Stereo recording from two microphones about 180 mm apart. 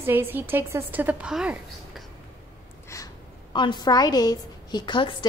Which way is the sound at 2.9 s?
15° left (ahead or behind).